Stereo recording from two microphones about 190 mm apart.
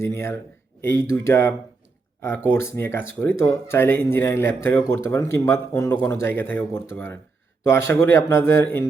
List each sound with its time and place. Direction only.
0.0 s speech: 15° left (ahead or behind)